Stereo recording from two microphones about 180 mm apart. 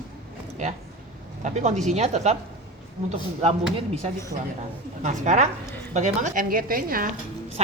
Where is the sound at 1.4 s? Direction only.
40° right (ahead or behind).